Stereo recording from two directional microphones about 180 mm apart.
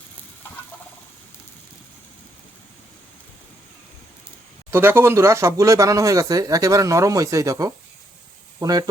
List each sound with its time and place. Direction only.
4.7 s speech: 10° right (ahead or behind)